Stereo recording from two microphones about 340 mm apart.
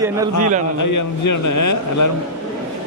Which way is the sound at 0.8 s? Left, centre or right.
Left.